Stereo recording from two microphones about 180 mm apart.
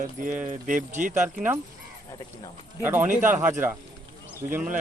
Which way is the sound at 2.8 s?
10° right (ahead or behind).